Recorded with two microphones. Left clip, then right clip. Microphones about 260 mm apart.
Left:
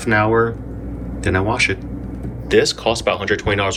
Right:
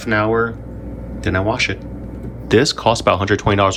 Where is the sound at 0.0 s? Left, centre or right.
Centre.